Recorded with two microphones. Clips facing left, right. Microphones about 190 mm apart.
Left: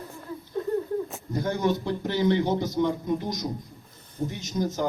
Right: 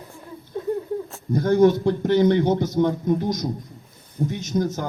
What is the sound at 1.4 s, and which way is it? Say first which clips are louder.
A man's voice: right 9 dB; 50° right (ahead or behind).